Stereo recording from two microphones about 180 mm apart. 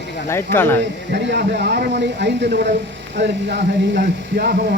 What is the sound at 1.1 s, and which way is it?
Speech, 70° right (ahead or behind).